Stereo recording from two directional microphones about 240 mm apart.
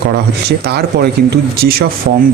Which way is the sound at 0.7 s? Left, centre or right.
Right.